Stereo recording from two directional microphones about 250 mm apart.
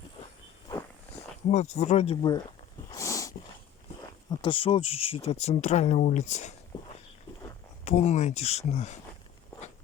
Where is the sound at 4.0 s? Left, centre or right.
Left.